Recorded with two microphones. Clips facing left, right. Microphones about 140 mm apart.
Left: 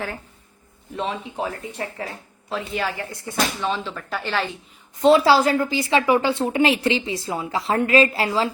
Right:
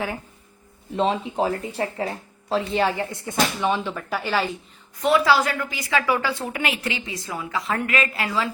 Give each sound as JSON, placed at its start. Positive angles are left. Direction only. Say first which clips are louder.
{"t": 0.9, "sound": "speech", "louder": "right 5 dB", "side_deg": -30}
{"t": 4.9, "sound": "a woman's voice", "louder": "left 4 dB", "side_deg": 25}